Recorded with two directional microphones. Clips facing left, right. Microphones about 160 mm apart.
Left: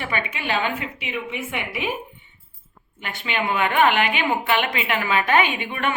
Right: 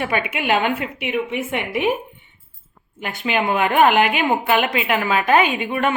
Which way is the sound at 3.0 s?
45° right (ahead or behind).